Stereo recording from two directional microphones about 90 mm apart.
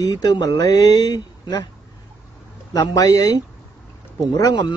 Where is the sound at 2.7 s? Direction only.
45° left (ahead or behind).